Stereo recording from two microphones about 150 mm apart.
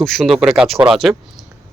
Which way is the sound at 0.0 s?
Centre (ahead or behind).